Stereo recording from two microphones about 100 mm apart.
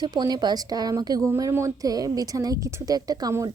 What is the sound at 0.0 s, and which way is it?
Speech, 45° right (ahead or behind).